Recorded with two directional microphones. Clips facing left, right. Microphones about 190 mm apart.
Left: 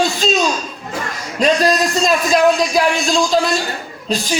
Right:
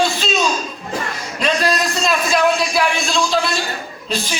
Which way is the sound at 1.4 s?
40° left (ahead or behind).